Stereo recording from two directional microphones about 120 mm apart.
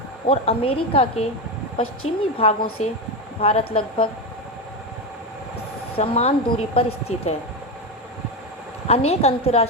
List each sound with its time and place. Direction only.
0.3 s a woman's voice: 55° left (ahead or behind)
6.0 s a woman's voice: 60° left (ahead or behind)
8.9 s a woman's voice: 60° left (ahead or behind)